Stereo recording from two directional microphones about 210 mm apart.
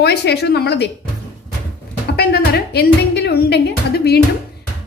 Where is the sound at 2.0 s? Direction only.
50° left (ahead or behind).